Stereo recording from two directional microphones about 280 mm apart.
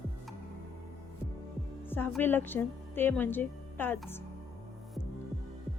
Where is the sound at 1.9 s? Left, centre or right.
Centre.